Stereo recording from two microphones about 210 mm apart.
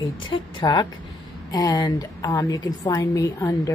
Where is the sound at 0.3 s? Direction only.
20° left (ahead or behind).